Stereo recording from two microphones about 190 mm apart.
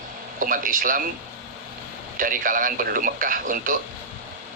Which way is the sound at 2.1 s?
45° right (ahead or behind).